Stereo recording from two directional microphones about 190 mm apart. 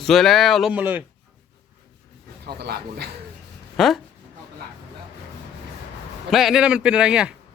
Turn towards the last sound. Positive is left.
turn(degrees=-5)  # may be behind; listen again after turning